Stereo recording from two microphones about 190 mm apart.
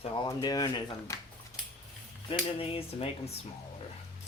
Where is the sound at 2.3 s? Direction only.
30° left (ahead or behind).